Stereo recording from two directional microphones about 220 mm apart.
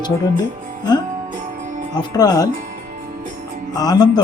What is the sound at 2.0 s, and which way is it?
Speech, 15° left (ahead or behind).